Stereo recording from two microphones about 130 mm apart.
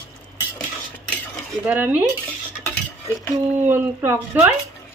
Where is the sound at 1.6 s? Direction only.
15° right (ahead or behind).